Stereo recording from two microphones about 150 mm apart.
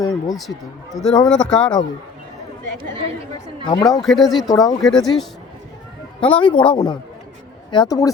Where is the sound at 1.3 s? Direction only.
5° left (ahead or behind).